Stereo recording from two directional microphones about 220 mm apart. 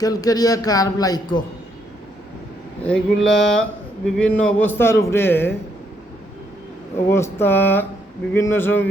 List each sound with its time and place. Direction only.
0.0 s speech: 15° left (ahead or behind)
2.8 s speech: 5° left (ahead or behind)
6.9 s speech: 10° left (ahead or behind)